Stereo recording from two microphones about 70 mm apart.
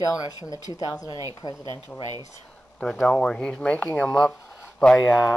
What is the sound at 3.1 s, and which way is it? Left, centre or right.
Speech, centre.